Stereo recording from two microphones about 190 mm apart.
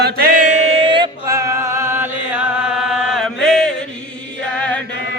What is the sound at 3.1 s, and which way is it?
Chant, centre (ahead or behind).